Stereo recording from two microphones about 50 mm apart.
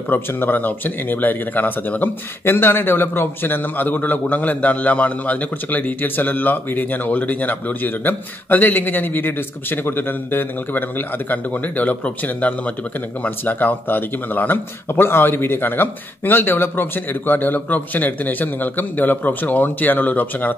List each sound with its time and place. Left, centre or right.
0.1 s speech: left